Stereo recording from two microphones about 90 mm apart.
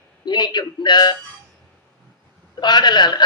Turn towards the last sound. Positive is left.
turn(degrees=55)  # may be behind; listen again after turning